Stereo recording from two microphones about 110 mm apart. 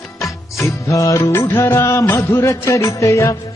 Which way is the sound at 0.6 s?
30° left (ahead or behind).